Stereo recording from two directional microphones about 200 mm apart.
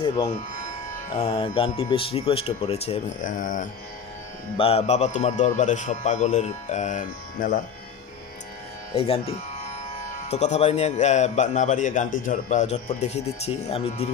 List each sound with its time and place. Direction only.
1.1 s speech: 25° left (ahead or behind); by 3.6 s 40° left (ahead or behind)
4.6 s a man's voice: 30° left (ahead or behind)
8.9 s a man's voice: 30° left (ahead or behind)